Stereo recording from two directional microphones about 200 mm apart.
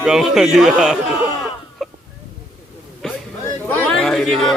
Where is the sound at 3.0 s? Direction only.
Centre (ahead or behind).